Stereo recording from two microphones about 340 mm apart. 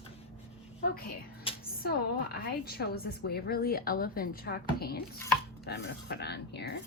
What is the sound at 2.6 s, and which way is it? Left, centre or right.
A woman's voice, left.